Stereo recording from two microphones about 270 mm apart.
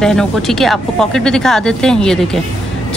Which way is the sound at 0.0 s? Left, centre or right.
Centre.